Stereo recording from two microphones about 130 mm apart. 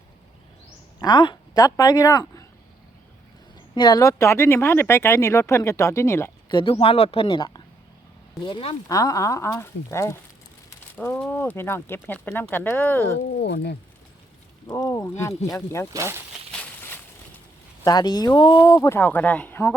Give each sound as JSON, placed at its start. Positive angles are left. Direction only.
{"t": 0.9, "sound": "speech", "side_deg": 35}
{"t": 3.8, "sound": "speech", "side_deg": 35}
{"t": 6.5, "sound": "speech", "side_deg": 40}
{"t": 8.9, "sound": "speech", "side_deg": 25}
{"t": 10.9, "sound": "speech", "side_deg": 10}
{"t": 14.7, "sound": "speech", "side_deg": 25}
{"t": 15.9, "sound": "speech", "side_deg": -20}
{"t": 16.8, "sound": "a sound", "side_deg": 15}
{"t": 17.8, "sound": "speech", "side_deg": 30}
{"t": 18.8, "sound": "speech", "side_deg": 15}